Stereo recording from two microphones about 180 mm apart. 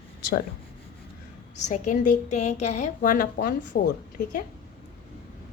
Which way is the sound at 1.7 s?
45° left (ahead or behind).